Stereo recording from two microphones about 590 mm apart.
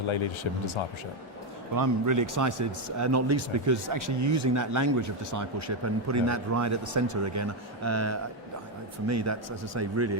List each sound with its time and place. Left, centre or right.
1.7 s speech: right